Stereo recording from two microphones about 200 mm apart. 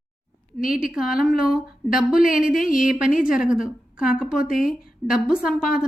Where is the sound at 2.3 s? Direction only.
45° left (ahead or behind).